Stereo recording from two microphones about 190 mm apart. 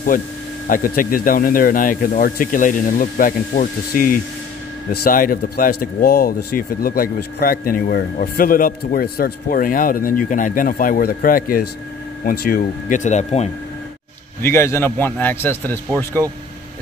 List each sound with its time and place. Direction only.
0.7 s speech: 45° left (ahead or behind)
14.4 s speech: 15° left (ahead or behind)